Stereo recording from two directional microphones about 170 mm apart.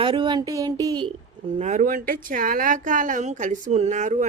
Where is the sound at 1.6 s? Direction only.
50° right (ahead or behind).